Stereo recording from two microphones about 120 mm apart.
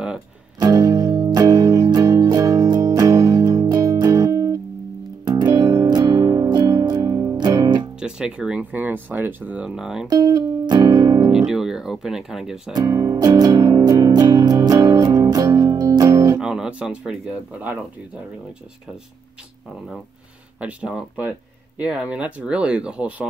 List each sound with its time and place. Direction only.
0.6 s music: 30° right (ahead or behind)
8.0 s speech: 5° right (ahead or behind)
10.0 s music: 30° right (ahead or behind)
11.2 s speech: 5° right (ahead or behind)
12.7 s music: 25° right (ahead or behind)
16.3 s speech: 5° right (ahead or behind)
20.6 s speech: 10° right (ahead or behind)